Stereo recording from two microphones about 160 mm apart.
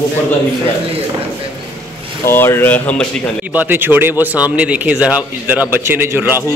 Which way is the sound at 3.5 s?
10° right (ahead or behind).